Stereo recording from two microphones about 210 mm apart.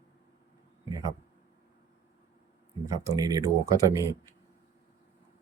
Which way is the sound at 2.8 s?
15° right (ahead or behind).